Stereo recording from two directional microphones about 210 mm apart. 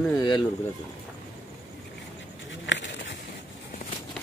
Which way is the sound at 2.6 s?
60° left (ahead or behind).